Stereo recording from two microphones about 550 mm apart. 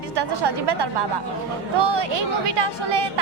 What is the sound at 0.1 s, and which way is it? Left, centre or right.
A woman's voice, right.